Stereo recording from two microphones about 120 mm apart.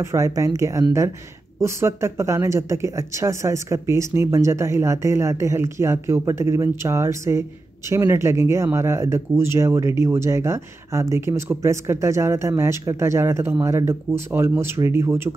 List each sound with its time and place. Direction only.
0.0 s speech: 25° right (ahead or behind)